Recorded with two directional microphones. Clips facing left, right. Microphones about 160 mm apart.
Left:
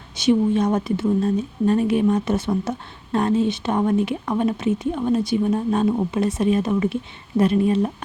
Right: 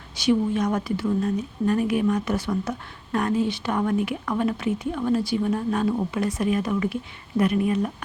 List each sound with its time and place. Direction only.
0.2 s speech: 25° left (ahead or behind)